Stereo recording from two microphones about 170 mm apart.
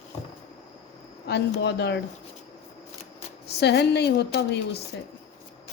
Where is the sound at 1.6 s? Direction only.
80° left.